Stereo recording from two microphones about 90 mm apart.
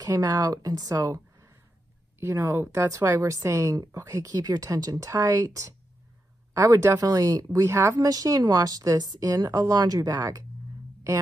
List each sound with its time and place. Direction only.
0.0 s a woman's voice: 45° right (ahead or behind)